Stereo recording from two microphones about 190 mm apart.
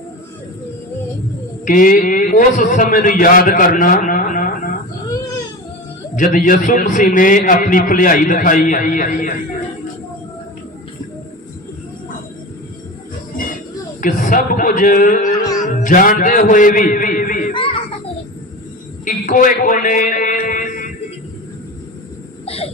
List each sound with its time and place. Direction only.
1.6 s a man's voice: 45° left (ahead or behind)
6.1 s a man's voice: 45° left (ahead or behind)
14.0 s a man's voice: 45° left (ahead or behind)
17.5 s children playing: 30° left (ahead or behind)
19.0 s a sound: 45° left (ahead or behind)
22.4 s a sound: 30° left (ahead or behind)